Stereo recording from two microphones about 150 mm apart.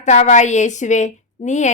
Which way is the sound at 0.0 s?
50° left (ahead or behind).